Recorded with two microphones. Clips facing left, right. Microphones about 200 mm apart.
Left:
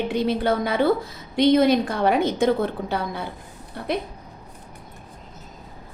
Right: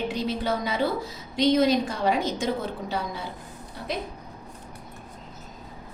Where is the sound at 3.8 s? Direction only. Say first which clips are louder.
Left 5 dB; 60° left (ahead or behind).